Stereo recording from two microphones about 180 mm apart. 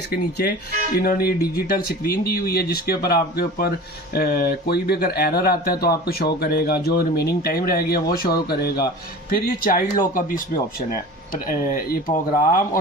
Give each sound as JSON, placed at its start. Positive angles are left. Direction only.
{"t": 0.1, "sound": "speech", "side_deg": 60}
{"t": 11.3, "sound": "speech", "side_deg": 50}